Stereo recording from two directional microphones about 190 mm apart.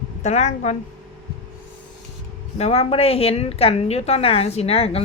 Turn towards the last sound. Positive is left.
turn(degrees=30)  # may be behind; listen again after turning